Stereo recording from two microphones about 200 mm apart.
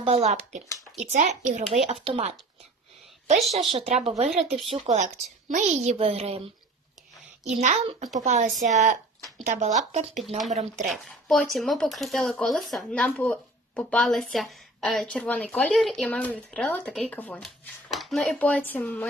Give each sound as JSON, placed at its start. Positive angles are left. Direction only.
{"t": 0.0, "sound": "a child's voice", "side_deg": -30}
{"t": 3.6, "sound": "a child's voice", "side_deg": -30}
{"t": 10.2, "sound": "speech", "side_deg": 0}
{"t": 10.5, "sound": "a child's voice", "side_deg": -35}
{"t": 10.9, "sound": "speech", "side_deg": 0}